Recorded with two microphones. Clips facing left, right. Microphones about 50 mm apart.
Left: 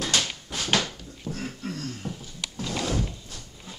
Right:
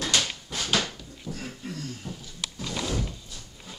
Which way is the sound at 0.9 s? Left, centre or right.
Left.